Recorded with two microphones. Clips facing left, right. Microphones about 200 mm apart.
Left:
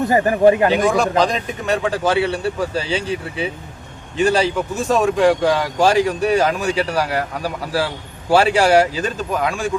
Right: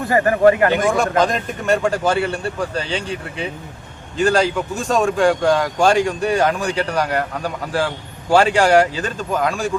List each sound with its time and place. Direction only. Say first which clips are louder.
0.0 s speech: even; 20° left (ahead or behind)
0.7 s a man's voice: left 1 dB; centre (ahead or behind)